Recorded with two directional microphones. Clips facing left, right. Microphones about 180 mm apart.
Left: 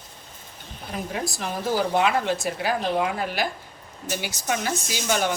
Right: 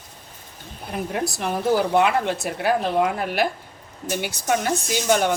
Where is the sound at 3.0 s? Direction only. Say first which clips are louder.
Right 4 dB; 50° right (ahead or behind).